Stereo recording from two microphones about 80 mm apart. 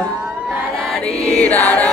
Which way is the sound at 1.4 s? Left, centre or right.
Centre.